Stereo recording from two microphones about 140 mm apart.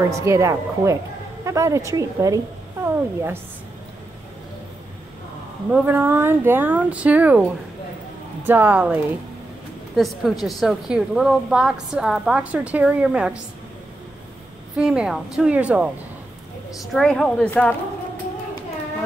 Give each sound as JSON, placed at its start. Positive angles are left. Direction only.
{"t": 0.1, "sound": "a woman's voice", "side_deg": -20}
{"t": 5.7, "sound": "speech", "side_deg": -15}
{"t": 8.5, "sound": "speech", "side_deg": -15}
{"t": 9.9, "sound": "a woman's voice", "side_deg": 0}
{"t": 14.8, "sound": "speech", "side_deg": -5}
{"t": 16.9, "sound": "a woman's voice", "side_deg": 5}